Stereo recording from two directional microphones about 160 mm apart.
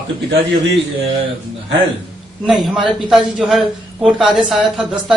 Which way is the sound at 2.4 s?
Centre (ahead or behind).